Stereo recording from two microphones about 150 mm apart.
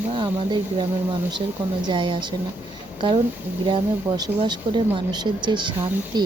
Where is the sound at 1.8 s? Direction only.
35° right (ahead or behind).